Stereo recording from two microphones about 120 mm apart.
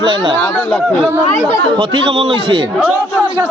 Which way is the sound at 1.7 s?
40° right (ahead or behind).